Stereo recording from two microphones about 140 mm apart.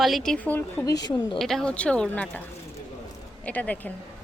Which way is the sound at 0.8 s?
30° left (ahead or behind).